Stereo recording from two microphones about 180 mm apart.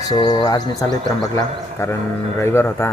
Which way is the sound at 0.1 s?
20° left (ahead or behind).